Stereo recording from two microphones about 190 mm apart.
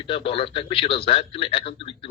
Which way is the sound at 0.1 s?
30° left (ahead or behind).